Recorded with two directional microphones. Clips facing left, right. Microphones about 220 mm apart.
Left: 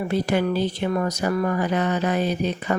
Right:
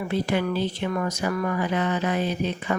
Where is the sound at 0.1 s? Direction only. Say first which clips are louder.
Left 2 dB; 40° left (ahead or behind).